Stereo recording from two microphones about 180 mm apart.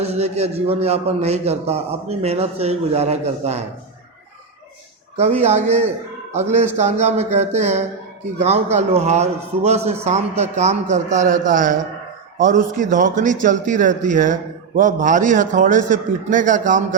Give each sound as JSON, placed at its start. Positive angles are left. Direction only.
{"t": 0.0, "sound": "a man's voice", "side_deg": -35}
{"t": 5.1, "sound": "a man's voice", "side_deg": -35}